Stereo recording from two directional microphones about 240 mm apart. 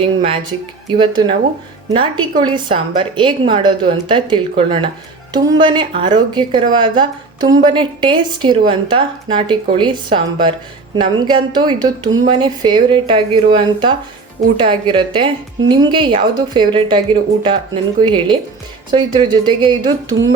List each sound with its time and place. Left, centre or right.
0.0 s a woman's voice: right